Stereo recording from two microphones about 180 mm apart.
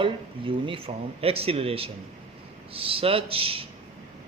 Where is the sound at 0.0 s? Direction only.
30° right (ahead or behind).